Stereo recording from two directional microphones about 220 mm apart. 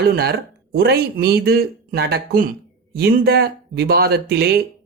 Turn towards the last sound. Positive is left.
turn(degrees=-45)  # may be behind; listen again after turning